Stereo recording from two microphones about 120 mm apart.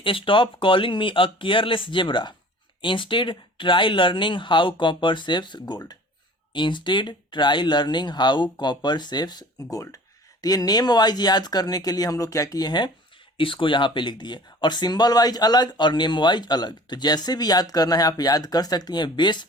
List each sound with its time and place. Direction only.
0.0 s speech: 45° left (ahead or behind)